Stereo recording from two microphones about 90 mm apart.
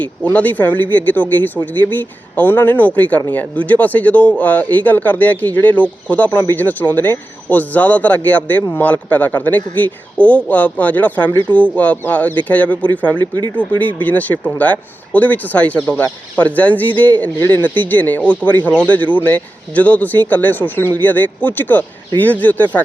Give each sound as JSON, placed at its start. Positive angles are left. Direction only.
{"t": 0.3, "sound": "speech", "side_deg": 15}